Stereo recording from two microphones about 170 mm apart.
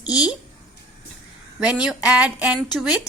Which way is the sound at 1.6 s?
5° right (ahead or behind).